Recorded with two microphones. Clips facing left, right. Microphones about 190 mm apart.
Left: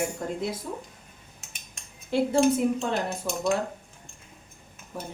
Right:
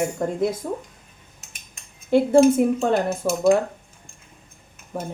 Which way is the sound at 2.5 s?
50° right (ahead or behind).